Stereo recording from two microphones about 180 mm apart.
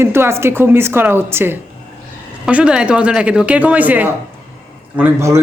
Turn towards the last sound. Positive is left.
turn(degrees=-15)  # may be behind; listen again after turning